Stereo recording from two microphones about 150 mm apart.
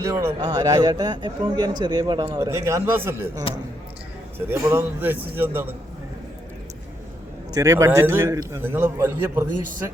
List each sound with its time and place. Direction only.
0.0 s a man's voice: 20° right (ahead or behind)
2.4 s a man's voice: 20° right (ahead or behind)
4.4 s a man's voice: 15° right (ahead or behind)
7.5 s a man's voice: 20° right (ahead or behind)